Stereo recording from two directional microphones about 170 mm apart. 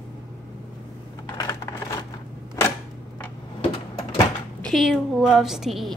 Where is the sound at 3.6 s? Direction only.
30° left (ahead or behind).